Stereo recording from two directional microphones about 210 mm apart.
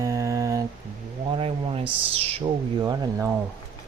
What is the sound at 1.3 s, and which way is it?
Speech, 25° right (ahead or behind).